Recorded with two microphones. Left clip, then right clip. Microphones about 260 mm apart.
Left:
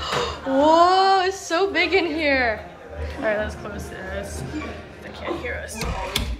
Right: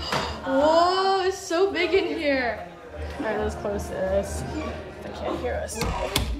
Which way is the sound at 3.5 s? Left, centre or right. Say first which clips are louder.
Right 4 dB; right.